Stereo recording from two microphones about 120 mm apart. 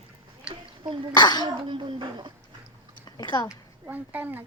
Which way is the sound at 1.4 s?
40° right (ahead or behind).